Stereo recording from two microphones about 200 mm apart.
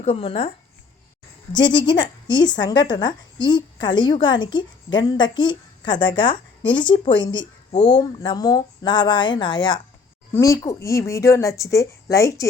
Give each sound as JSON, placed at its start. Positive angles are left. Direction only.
{"t": 0.0, "sound": "speech", "side_deg": 25}
{"t": 1.5, "sound": "speech", "side_deg": 20}